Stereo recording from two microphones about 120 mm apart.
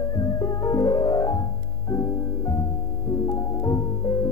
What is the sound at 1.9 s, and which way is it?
Music, 30° left (ahead or behind).